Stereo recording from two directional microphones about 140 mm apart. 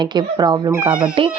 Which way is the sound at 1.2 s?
40° right (ahead or behind).